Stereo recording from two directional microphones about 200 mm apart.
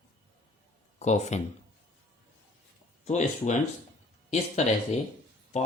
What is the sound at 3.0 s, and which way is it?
Speech, 35° left (ahead or behind).